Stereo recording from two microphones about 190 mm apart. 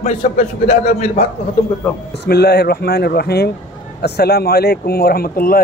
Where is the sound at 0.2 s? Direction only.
40° left (ahead or behind).